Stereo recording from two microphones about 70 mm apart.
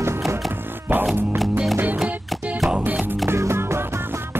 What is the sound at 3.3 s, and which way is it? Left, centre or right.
Music, right.